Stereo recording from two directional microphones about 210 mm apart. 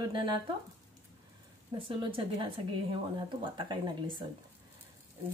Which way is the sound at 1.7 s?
20° right (ahead or behind).